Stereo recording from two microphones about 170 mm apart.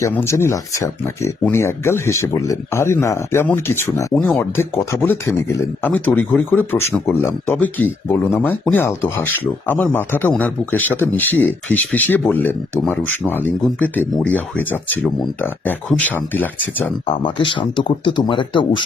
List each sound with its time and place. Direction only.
0.0 s speech: 15° left (ahead or behind)
17.1 s speech: 30° left (ahead or behind)